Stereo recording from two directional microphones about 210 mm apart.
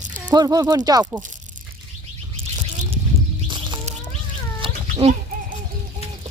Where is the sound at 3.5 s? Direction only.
25° right (ahead or behind).